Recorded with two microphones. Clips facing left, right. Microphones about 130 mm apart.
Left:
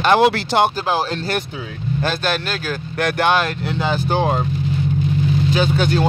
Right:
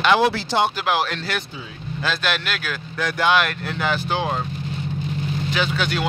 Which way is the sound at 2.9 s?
65° left (ahead or behind).